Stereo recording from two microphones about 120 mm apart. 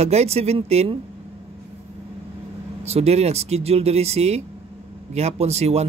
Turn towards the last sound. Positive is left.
turn(degrees=-65)  # may be behind; listen again after turning